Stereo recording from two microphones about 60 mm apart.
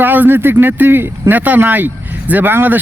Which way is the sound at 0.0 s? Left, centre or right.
Right.